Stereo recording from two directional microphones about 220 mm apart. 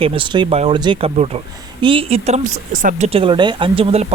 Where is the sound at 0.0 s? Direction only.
25° right (ahead or behind).